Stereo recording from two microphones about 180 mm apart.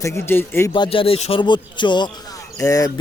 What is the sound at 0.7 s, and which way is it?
Speech, 30° left (ahead or behind).